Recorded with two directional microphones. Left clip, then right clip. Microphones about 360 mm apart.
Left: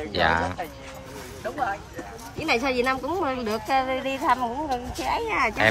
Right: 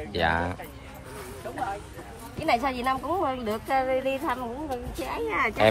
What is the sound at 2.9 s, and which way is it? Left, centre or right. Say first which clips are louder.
A woman's voice: left 1 dB; centre.